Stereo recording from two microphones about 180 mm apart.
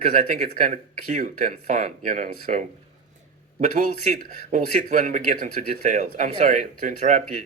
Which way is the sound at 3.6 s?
45° right (ahead or behind).